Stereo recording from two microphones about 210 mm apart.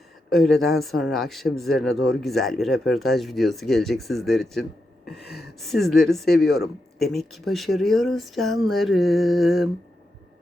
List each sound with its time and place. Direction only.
0.6 s speech: centre (ahead or behind)
5.8 s speech: centre (ahead or behind)